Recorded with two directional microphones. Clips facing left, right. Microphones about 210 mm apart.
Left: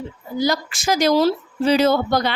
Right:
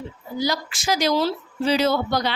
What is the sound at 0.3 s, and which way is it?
A woman's voice, 50° left (ahead or behind).